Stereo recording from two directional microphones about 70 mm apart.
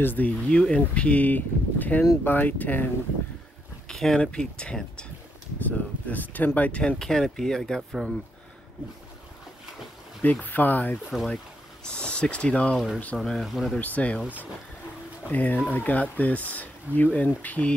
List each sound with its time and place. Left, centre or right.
0.0 s speech: left
3.9 s a sound: centre
4.2 s speech: centre
5.7 s speech: left
7.0 s speech: centre
7.9 s speech: centre
10.4 s speech: left
11.8 s speech: centre
12.7 s speech: centre
13.7 s speech: left
15.2 s speech: left